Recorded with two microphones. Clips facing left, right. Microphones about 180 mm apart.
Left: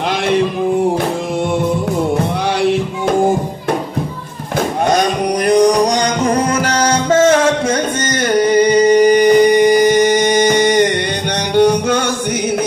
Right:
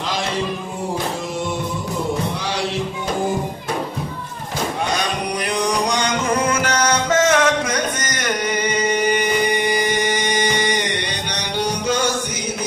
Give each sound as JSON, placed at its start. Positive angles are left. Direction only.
{"t": 4.8, "sound": "music", "side_deg": 45}
{"t": 11.5, "sound": "music", "side_deg": 55}